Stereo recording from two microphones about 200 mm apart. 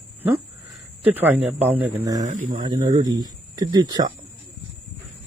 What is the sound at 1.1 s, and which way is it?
A man's voice, 10° right (ahead or behind).